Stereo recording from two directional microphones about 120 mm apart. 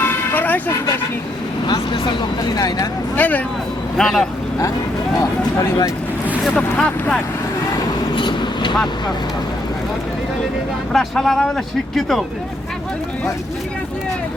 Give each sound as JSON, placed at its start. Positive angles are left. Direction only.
{"t": 0.0, "sound": "vehicle", "side_deg": 15}
{"t": 1.6, "sound": "speech", "side_deg": 40}
{"t": 3.2, "sound": "speech", "side_deg": 15}
{"t": 6.4, "sound": "speech", "side_deg": 10}
{"t": 8.1, "sound": "vehicle", "side_deg": 40}
{"t": 10.9, "sound": "speech", "side_deg": 5}